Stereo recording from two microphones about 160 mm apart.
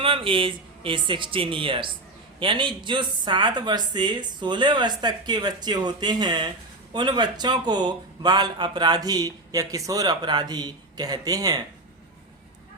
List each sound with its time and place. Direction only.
0.0 s a man's voice: 35° right (ahead or behind)